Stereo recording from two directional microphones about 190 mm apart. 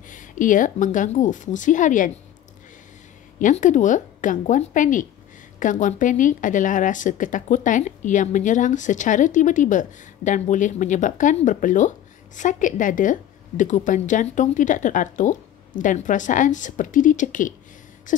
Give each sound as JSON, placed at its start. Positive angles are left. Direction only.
{"t": 0.1, "sound": "a woman's voice", "side_deg": 45}
{"t": 3.3, "sound": "speech", "side_deg": 40}